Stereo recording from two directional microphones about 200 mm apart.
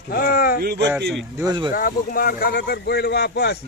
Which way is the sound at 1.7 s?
45° left (ahead or behind).